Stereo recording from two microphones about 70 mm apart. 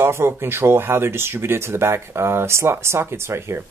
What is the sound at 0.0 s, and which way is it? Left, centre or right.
Speech, right.